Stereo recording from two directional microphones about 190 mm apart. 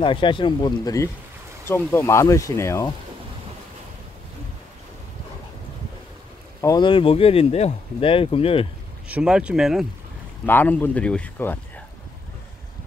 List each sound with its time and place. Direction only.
0.0 s speech: 25° left (ahead or behind)
6.6 s speech: 20° left (ahead or behind)
9.1 s speech: 5° right (ahead or behind)
10.4 s speech: 10° left (ahead or behind)